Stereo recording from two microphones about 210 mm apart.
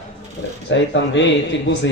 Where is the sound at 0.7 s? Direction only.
60° left (ahead or behind).